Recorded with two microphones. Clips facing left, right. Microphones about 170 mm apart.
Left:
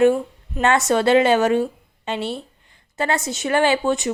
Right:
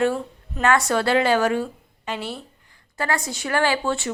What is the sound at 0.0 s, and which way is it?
A woman's voice, 15° left (ahead or behind).